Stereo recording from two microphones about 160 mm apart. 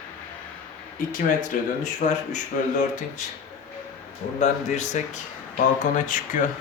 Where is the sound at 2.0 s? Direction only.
55° left (ahead or behind).